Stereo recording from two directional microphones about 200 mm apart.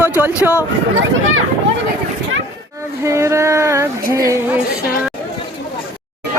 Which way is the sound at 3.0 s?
15° right (ahead or behind).